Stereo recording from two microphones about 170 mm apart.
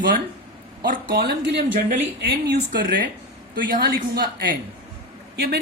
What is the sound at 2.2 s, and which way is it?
Speech, 90° right.